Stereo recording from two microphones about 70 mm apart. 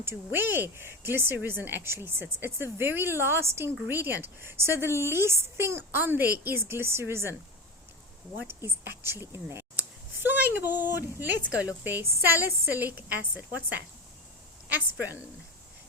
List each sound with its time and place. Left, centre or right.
0.3 s speech: right
8.4 s speech: right
10.2 s a woman's voice: right